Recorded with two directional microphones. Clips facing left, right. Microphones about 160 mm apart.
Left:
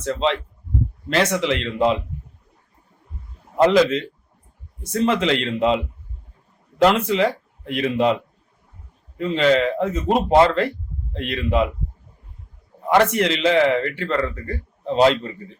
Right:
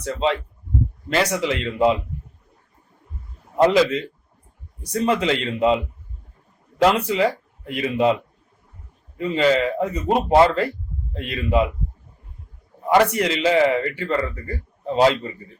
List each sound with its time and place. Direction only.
0.0 s a man's voice: 5° right (ahead or behind)
3.6 s a man's voice: centre (ahead or behind)
7.1 s speech: centre (ahead or behind)
9.1 s a man's voice: 5° right (ahead or behind)
13.1 s a man's voice: 5° right (ahead or behind)